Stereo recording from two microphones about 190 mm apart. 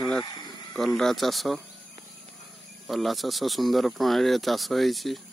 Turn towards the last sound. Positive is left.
turn(degrees=0)  # may be behind; listen again after turning